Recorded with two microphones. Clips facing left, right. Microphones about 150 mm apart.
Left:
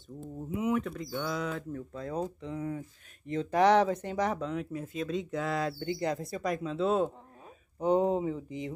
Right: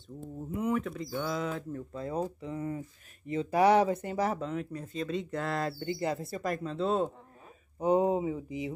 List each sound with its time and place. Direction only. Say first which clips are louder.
0.6 s speech: left 1 dB; centre (ahead or behind)